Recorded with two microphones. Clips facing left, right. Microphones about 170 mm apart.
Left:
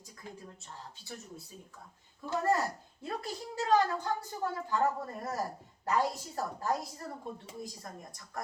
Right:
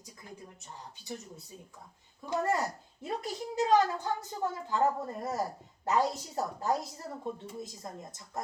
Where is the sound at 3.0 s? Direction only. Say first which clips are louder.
Right 3 dB; 20° right (ahead or behind).